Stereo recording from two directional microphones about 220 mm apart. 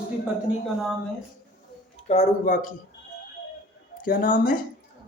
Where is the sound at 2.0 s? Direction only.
30° left (ahead or behind).